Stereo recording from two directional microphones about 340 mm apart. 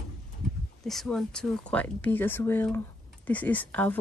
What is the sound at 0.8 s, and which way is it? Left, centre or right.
Speech, centre.